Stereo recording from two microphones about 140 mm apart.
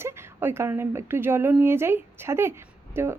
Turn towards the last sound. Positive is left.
turn(degrees=-15)  # may be behind; listen again after turning